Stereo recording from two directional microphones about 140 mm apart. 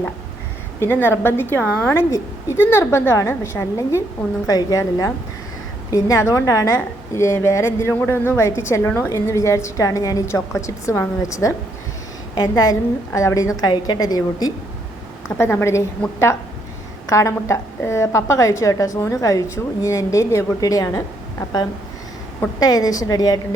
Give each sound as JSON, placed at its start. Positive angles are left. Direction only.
{"t": 0.8, "sound": "a woman's voice", "side_deg": 15}
{"t": 15.4, "sound": "a woman's voice", "side_deg": 15}
{"t": 17.1, "sound": "a woman's voice", "side_deg": 20}
{"t": 22.6, "sound": "a woman's voice", "side_deg": 25}